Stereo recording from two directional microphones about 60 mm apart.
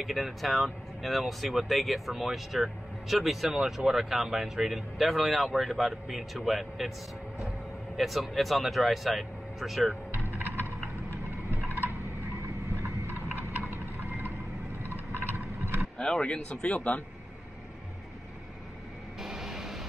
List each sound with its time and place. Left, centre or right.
0.0 s speech: centre
8.0 s speech: centre
13.0 s a sound: right
15.3 s a sound: right
16.0 s a man's voice: centre
19.1 s vehicle: centre